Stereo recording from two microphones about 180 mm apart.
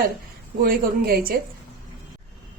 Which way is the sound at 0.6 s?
55° right (ahead or behind).